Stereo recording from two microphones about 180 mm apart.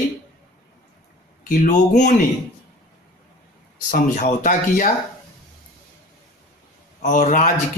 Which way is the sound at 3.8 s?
45° left (ahead or behind).